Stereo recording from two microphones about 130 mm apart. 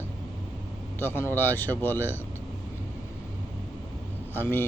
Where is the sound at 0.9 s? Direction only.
15° left (ahead or behind).